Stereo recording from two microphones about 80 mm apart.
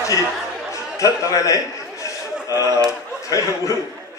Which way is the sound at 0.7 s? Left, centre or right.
Left.